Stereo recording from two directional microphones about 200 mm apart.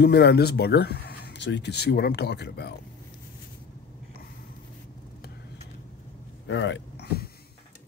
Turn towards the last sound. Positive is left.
turn(degrees=60)  # may be behind; listen again after turning